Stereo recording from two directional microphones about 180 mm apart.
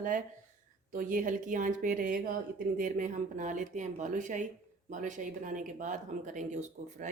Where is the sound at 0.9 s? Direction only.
50° right (ahead or behind).